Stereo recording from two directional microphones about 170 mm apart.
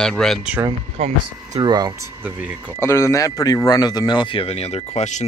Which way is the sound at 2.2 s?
5° right (ahead or behind).